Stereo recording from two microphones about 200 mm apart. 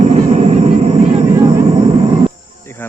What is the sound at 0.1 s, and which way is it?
Vehicle, 30° right (ahead or behind).